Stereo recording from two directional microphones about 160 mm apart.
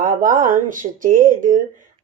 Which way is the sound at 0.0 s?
55° right (ahead or behind).